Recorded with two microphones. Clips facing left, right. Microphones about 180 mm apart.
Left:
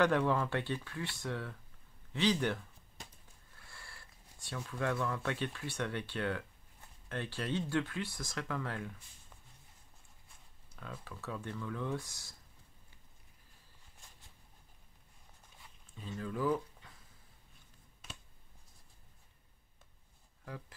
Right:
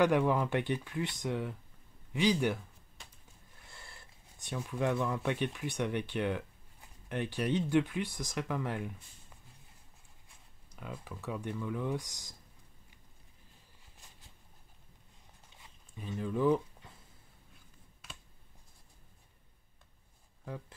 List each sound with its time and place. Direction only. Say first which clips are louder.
0.0 s speech: right 2 dB; 15° right (ahead or behind)
10.8 s speech: right 3 dB; 15° right (ahead or behind)
16.0 s speech: right 5 dB; 15° right (ahead or behind)